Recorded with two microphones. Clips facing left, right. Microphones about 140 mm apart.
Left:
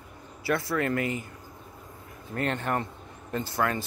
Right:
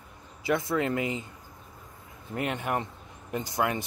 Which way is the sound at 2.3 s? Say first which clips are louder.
Left 1 dB; 10° right (ahead or behind).